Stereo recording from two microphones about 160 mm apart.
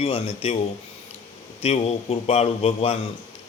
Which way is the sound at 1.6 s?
40° left (ahead or behind).